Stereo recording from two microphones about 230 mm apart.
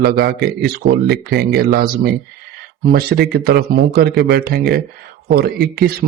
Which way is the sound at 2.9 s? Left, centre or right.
Right.